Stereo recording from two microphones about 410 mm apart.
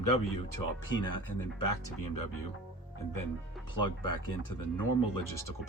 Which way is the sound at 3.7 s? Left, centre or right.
Left.